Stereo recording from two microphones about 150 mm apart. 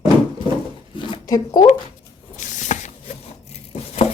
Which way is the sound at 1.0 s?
30° left (ahead or behind).